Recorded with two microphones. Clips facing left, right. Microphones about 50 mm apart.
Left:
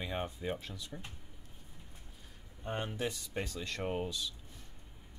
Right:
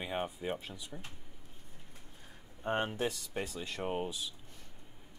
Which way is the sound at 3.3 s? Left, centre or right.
Centre.